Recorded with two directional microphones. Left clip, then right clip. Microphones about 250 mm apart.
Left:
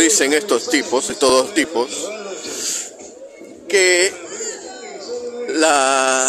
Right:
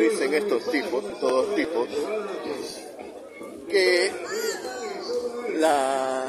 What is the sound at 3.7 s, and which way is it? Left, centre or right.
Speech, left.